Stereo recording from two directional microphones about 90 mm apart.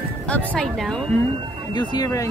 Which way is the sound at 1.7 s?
55° left (ahead or behind).